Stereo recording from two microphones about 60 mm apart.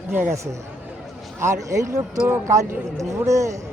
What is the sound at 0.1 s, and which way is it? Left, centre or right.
Speech, right.